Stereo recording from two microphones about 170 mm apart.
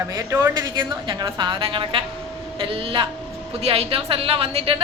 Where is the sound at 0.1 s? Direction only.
20° right (ahead or behind).